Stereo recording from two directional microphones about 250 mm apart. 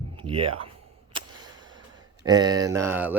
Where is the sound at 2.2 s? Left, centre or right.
Centre.